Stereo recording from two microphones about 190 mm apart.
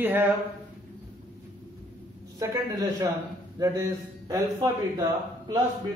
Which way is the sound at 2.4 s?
15° right (ahead or behind).